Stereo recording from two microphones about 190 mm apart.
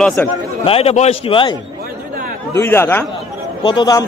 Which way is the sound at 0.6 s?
30° left (ahead or behind).